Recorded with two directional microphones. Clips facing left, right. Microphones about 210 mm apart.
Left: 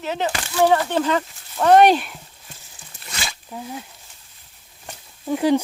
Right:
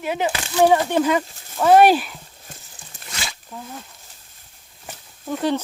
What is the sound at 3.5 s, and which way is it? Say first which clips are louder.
Speech: left 4 dB; 10° left (ahead or behind).